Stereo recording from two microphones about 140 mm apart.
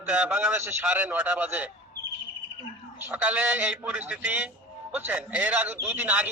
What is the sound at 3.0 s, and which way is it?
A man's voice, 10° right (ahead or behind).